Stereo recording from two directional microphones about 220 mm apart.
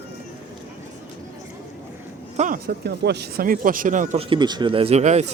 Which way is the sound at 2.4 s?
40° right (ahead or behind).